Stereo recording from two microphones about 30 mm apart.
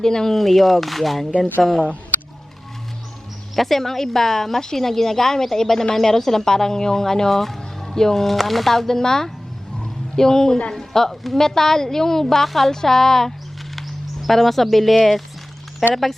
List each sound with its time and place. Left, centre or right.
0.0 s speech: centre
0.3 s speech: centre
3.5 s speech: centre
8.9 s speech: centre